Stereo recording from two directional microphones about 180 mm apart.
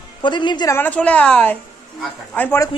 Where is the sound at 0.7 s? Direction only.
10° left (ahead or behind).